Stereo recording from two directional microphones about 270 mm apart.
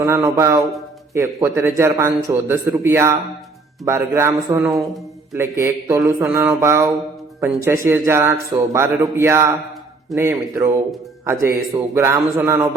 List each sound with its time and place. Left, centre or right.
0.0 s a man's voice: centre